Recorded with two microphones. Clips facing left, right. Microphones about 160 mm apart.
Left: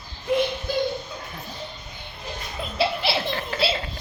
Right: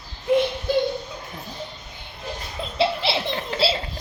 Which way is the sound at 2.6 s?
25° right (ahead or behind).